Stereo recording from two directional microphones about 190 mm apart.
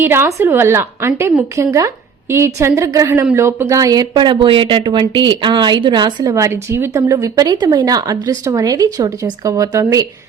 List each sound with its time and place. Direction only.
0.0 s a woman's voice: 10° right (ahead or behind)